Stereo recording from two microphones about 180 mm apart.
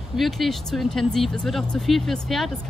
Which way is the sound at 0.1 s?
Centre (ahead or behind).